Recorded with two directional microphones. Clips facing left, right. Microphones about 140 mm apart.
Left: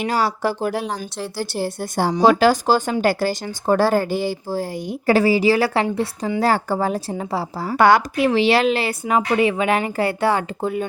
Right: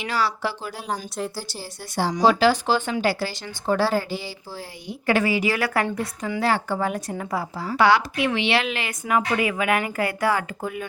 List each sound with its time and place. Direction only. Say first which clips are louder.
0.0 s speech: left 5 dB; 45° left (ahead or behind)
0.9 s speech: left 1 dB; centre (ahead or behind)
1.4 s a woman's voice: left 11 dB; 60° left (ahead or behind); by 6.4 s 30° left (ahead or behind)
6.4 s a woman's voice: left 3 dB; 40° left (ahead or behind)